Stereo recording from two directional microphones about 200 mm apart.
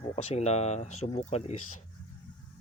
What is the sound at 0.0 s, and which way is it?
Speech, 30° left (ahead or behind).